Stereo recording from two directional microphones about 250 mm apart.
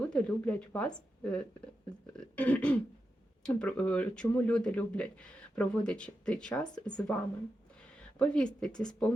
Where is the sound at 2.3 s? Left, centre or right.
Centre.